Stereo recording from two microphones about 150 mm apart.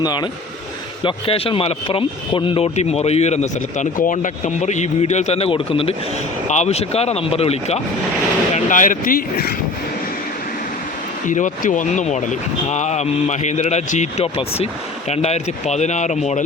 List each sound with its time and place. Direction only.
0.0 s speech: 30° left (ahead or behind)
6.5 s speech: 50° left (ahead or behind)
8.5 s speech: 60° left (ahead or behind); by 9.6 s 75° left (ahead or behind)
11.3 s speech: 60° left (ahead or behind)